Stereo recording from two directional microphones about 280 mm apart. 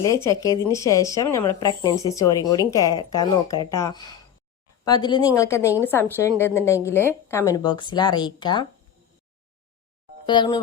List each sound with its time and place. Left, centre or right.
0.3 s a woman's voice: centre
10.2 s a woman's voice: centre